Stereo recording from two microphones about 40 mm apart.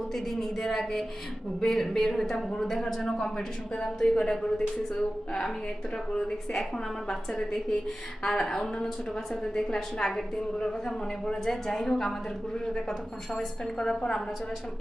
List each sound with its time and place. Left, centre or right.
0.1 s a woman's voice: centre
6.1 s a woman's voice: centre
11.3 s a woman's voice: centre